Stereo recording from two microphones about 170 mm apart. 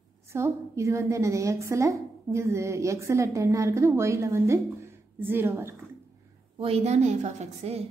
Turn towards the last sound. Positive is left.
turn(degrees=-40)  # may be behind; listen again after turning